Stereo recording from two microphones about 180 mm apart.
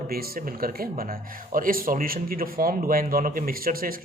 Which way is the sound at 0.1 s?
55° right (ahead or behind).